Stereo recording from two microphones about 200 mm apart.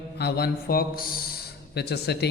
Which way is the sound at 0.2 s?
50° left (ahead or behind).